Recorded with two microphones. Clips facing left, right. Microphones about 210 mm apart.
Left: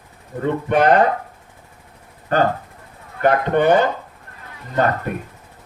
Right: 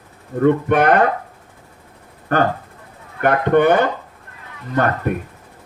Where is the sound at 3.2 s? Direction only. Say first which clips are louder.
Right 2 dB; 55° right (ahead or behind).